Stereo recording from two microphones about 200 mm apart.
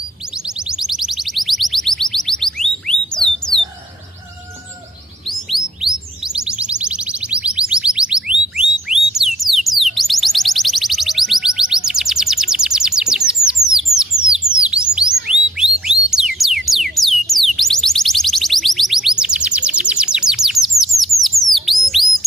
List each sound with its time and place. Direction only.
0.7 s music: centre (ahead or behind)
5.3 s music: centre (ahead or behind)
13.9 s a sound: 15° right (ahead or behind)
14.3 s bird: 5° right (ahead or behind)
15.5 s music: 5° right (ahead or behind)
21.2 s bird: centre (ahead or behind)